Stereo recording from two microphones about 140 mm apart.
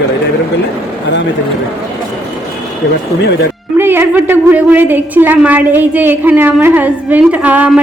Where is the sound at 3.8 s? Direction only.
15° right (ahead or behind).